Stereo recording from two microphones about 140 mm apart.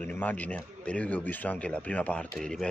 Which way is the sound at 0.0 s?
10° left (ahead or behind).